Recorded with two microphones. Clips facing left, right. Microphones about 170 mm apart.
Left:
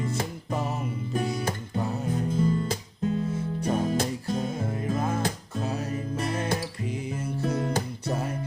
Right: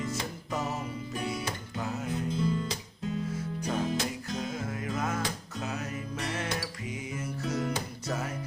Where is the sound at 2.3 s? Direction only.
50° left (ahead or behind).